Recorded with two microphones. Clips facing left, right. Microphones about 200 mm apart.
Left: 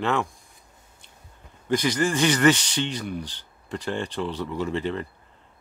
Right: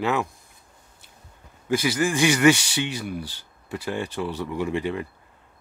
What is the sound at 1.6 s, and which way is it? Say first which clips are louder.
Speech: even; 5° right (ahead or behind).